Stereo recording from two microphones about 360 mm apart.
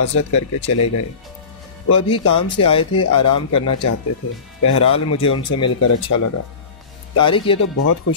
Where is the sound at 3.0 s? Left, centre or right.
Left.